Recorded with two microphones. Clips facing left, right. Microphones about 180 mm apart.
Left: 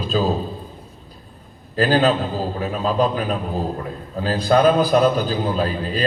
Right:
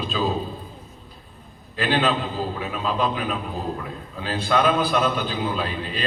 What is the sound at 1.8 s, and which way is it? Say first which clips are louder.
A man's voice: left 5 dB; 40° left (ahead or behind).